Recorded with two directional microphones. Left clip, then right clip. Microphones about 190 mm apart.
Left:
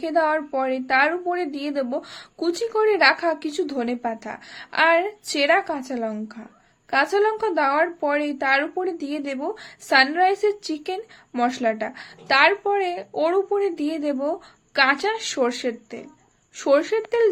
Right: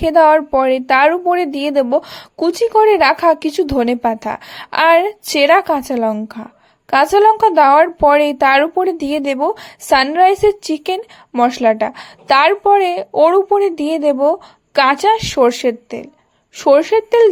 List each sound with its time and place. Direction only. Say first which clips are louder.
0.0 s a woman's voice: right 11 dB; 45° right (ahead or behind)